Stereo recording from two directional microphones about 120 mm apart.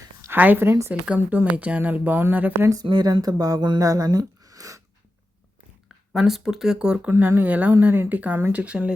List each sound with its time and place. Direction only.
0.2 s speech: 15° right (ahead or behind)
2.8 s speech: 35° right (ahead or behind)
6.1 s speech: centre (ahead or behind)
7.1 s speech: 20° right (ahead or behind)